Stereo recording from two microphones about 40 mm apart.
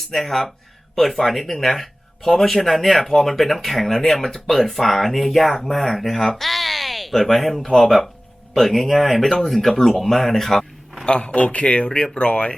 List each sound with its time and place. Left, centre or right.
0.1 s speech: centre
11.0 s a man's voice: left